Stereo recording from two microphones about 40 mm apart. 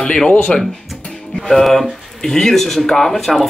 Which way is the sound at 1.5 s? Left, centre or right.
Centre.